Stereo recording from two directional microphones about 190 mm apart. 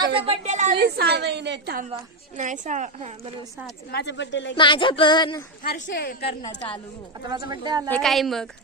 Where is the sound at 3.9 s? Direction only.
65° left (ahead or behind).